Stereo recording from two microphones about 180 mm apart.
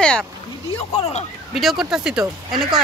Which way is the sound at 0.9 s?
35° left (ahead or behind).